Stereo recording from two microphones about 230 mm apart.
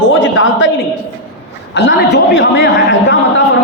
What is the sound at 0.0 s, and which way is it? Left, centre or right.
Speech, left.